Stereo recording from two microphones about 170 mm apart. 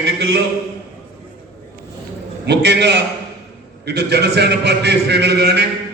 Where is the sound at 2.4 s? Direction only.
80° right.